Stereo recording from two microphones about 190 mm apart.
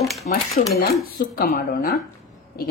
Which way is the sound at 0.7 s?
50° left (ahead or behind).